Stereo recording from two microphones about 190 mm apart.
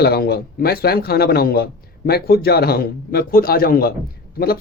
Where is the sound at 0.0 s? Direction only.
55° left (ahead or behind).